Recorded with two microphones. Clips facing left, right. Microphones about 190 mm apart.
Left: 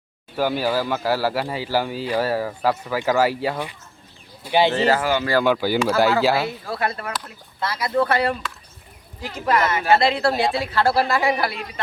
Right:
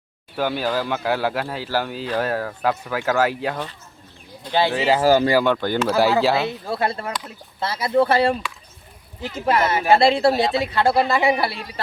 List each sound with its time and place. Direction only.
0.3 s speech: 10° left (ahead or behind)
4.7 s speech: 10° right (ahead or behind)
4.9 s speech: 35° right (ahead or behind)
5.4 s speech: 5° left (ahead or behind)
6.4 s speech: 25° right (ahead or behind)